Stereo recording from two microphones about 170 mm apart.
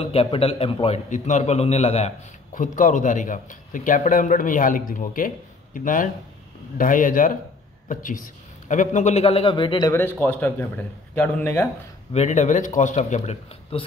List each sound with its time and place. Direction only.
0.0 s a man's voice: 35° left (ahead or behind)
2.5 s a man's voice: 50° left (ahead or behind); by 11.7 s 10° left (ahead or behind)
12.1 s speech: 40° left (ahead or behind)